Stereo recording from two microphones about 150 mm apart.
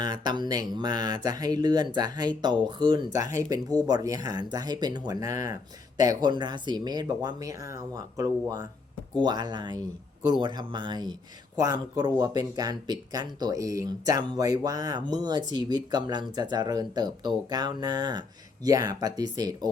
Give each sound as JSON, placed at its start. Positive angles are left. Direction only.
{"t": 0.0, "sound": "speech", "side_deg": -30}